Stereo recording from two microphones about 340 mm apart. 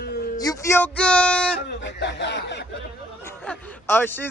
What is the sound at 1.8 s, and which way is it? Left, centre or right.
Speech, left.